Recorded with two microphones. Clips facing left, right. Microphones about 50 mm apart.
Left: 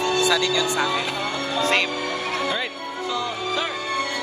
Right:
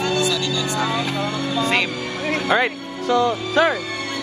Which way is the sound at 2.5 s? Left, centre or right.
Right.